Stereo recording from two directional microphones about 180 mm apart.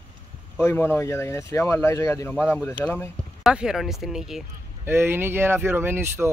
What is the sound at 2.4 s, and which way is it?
Speech, 5° right (ahead or behind).